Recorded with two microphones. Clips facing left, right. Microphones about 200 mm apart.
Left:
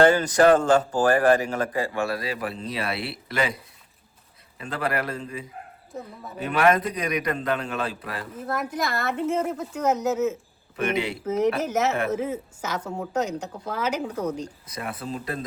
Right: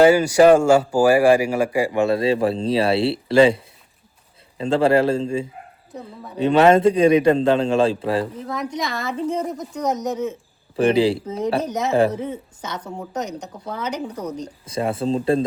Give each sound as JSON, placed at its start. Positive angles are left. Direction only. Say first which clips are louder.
{"t": 0.0, "sound": "a man's voice", "louder": "right 5 dB", "side_deg": -10}
{"t": 8.4, "sound": "a woman's voice", "louder": "right 1 dB", "side_deg": 5}
{"t": 10.8, "sound": "speech", "louder": "right 9 dB", "side_deg": -30}
{"t": 12.3, "sound": "a woman's voice", "louder": "left 1 dB", "side_deg": 10}
{"t": 14.4, "sound": "a man's voice", "louder": "right 10 dB", "side_deg": -30}